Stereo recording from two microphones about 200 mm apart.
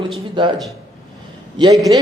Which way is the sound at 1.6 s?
20° right (ahead or behind).